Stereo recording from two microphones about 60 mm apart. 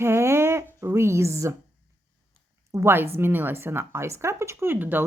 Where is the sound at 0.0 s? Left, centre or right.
Right.